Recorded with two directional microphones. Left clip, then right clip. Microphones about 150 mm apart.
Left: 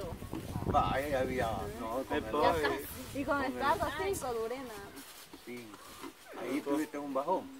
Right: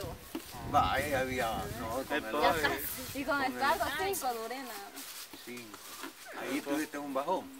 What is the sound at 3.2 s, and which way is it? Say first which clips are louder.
A woman's voice: right 1 dB; 20° right (ahead or behind).